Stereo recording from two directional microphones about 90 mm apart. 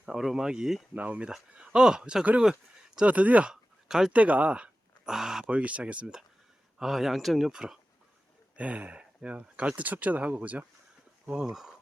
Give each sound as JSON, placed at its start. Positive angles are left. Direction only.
{"t": 0.0, "sound": "speech", "side_deg": -5}
{"t": 0.9, "sound": "speech", "side_deg": -15}
{"t": 11.5, "sound": "speech", "side_deg": -5}